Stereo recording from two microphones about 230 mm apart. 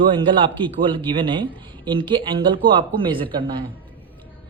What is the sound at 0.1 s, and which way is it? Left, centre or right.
Speech, right.